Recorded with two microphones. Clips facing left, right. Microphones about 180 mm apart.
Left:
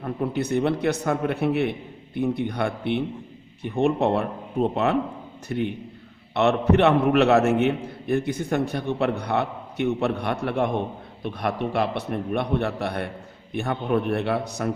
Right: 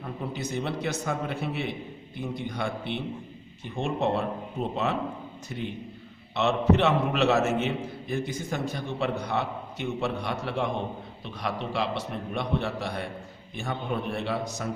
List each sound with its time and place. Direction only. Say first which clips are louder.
0.0 s a man's voice: left 7 dB; 60° left (ahead or behind)